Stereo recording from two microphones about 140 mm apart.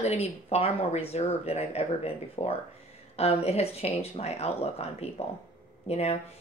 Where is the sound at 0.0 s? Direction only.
50° left (ahead or behind).